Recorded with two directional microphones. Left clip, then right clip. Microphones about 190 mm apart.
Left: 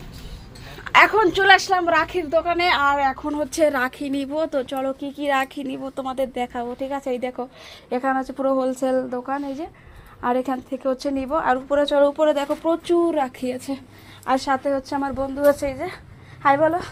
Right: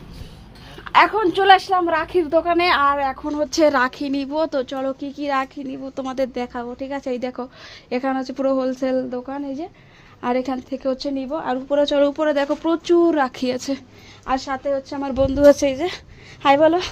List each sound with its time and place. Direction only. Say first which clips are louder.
0.9 s a woman's voice: left 1 dB; 5° right (ahead or behind)
2.1 s a woman's voice: right 3 dB; 20° right (ahead or behind)
2.9 s speech: left 1 dB; 15° right (ahead or behind)
3.6 s a woman's voice: right 3 dB; 25° right (ahead or behind)
5.5 s a woman's voice: left 1 dB; centre (ahead or behind)
6.0 s a woman's voice: right 1 dB; 30° right (ahead or behind)
11.8 s speech: right 1 dB; 35° right (ahead or behind)
14.3 s a woman's voice: left 1 dB; centre (ahead or behind)
15.0 s a woman's voice: right 7 dB; 45° right (ahead or behind)